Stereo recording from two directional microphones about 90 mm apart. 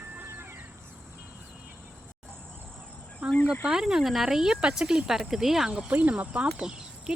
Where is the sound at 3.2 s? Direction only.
10° right (ahead or behind).